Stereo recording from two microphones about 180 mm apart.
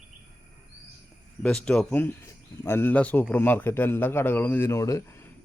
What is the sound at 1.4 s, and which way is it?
Speech, 5° left (ahead or behind).